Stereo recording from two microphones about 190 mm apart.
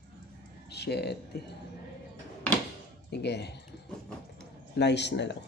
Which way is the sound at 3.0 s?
60° left (ahead or behind).